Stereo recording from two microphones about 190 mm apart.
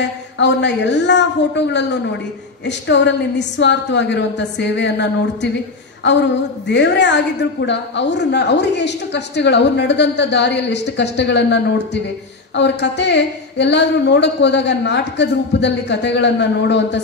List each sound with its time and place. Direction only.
0.4 s a woman's voice: 65° left (ahead or behind)
6.7 s a woman's voice: 65° left (ahead or behind)